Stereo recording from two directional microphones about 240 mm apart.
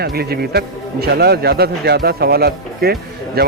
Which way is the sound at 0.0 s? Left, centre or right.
Right.